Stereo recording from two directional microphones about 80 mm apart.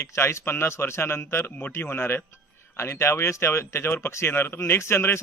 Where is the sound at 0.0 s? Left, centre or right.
Left.